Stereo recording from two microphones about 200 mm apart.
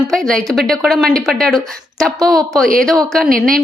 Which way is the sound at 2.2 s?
20° right (ahead or behind).